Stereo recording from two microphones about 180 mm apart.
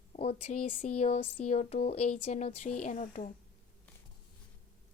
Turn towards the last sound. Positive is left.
turn(degrees=45)  # may be behind; listen again after turning